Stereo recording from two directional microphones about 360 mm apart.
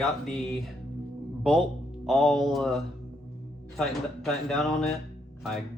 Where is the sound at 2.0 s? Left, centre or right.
Centre.